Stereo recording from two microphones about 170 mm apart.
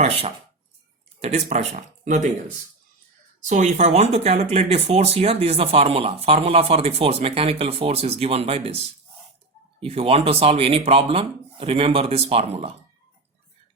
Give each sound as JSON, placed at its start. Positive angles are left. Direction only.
{"t": 0.0, "sound": "speech", "side_deg": -35}
{"t": 3.4, "sound": "speech", "side_deg": -45}
{"t": 9.8, "sound": "speech", "side_deg": -35}